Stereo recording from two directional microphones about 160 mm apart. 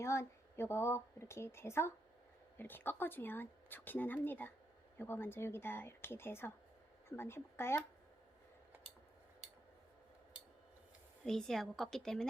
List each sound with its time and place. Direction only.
0.0 s speech: 20° left (ahead or behind)
11.3 s a woman's voice: 5° left (ahead or behind)